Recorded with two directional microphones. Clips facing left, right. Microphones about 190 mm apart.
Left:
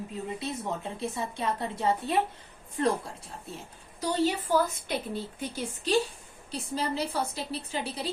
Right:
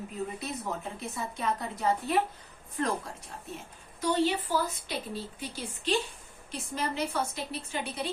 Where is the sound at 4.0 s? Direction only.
45° left (ahead or behind).